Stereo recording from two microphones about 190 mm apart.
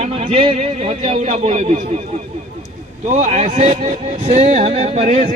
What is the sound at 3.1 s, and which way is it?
Speech, 40° right (ahead or behind).